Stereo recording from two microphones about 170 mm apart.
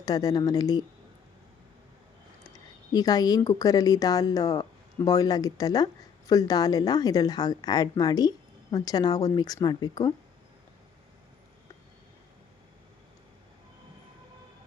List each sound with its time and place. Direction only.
0.0 s speech: 20° left (ahead or behind)
2.4 s speech: 20° left (ahead or behind)